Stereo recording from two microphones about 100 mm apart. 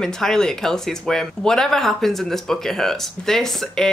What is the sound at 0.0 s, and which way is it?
Speech, 5° left (ahead or behind).